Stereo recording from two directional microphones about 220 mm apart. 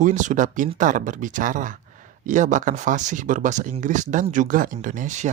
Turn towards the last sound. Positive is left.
turn(degrees=-35)  # may be behind; listen again after turning